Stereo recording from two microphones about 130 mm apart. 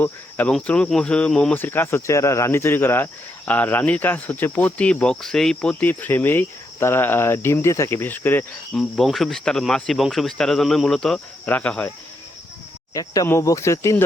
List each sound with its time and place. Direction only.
0.0 s speech: 10° left (ahead or behind)
8.7 s speech: 5° left (ahead or behind)
12.9 s speech: 25° left (ahead or behind)